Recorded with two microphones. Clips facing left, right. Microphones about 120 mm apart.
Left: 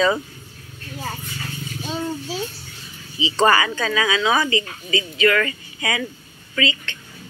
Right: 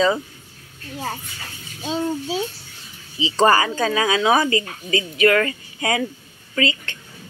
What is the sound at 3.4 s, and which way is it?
A child's voice, 40° right (ahead or behind).